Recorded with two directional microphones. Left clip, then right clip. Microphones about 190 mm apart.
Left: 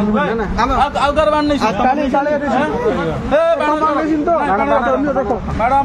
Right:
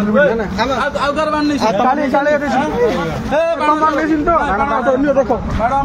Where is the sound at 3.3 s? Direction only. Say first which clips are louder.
Left 1 dB; 20° left (ahead or behind).